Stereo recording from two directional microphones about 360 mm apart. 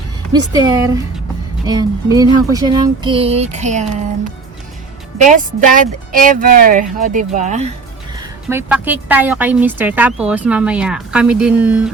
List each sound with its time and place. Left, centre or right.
0.3 s speech: centre
5.1 s speech: right
8.1 s a woman's voice: centre